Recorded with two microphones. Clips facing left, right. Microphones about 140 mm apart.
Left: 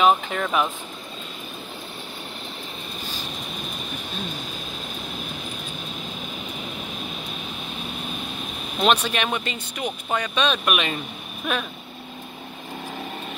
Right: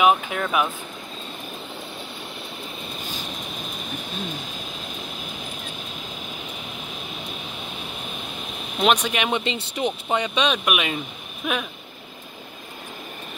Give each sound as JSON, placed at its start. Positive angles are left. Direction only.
{"t": 0.0, "sound": "speech", "side_deg": -5}
{"t": 8.7, "sound": "speech", "side_deg": -15}